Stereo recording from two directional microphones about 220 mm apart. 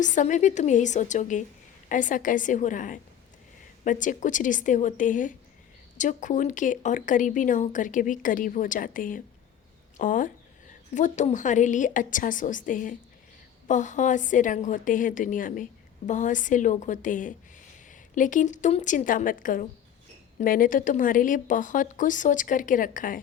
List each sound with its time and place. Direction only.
0.0 s speech: 35° left (ahead or behind)